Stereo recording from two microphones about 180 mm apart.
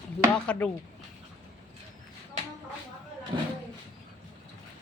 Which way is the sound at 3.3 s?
25° right (ahead or behind).